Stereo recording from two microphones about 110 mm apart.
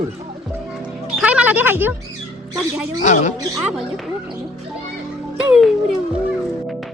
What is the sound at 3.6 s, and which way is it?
Speech, centre (ahead or behind).